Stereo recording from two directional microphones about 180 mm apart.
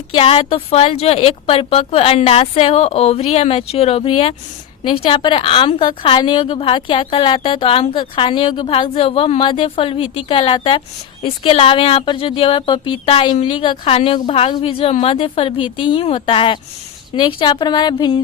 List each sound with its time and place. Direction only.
0.1 s a woman's voice: 30° left (ahead or behind)